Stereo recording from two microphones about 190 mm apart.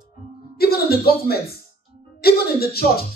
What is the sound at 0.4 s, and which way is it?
Music, 55° left (ahead or behind).